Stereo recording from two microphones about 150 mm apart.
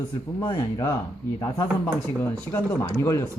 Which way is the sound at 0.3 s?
30° left (ahead or behind).